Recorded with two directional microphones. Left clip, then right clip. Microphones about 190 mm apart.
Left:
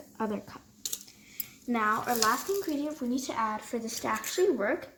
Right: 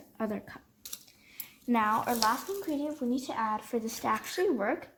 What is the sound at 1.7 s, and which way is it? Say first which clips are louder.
Speech: even; 45° right (ahead or behind).